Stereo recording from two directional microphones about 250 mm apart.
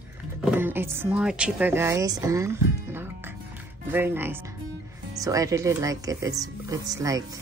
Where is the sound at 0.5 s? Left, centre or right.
Centre.